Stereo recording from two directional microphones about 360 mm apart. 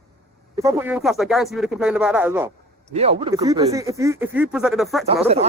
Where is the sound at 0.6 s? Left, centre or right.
Centre.